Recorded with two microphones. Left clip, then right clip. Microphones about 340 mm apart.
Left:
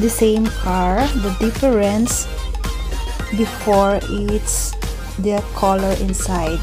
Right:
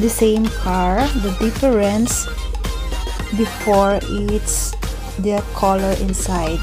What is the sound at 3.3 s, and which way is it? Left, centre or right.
Speech, centre.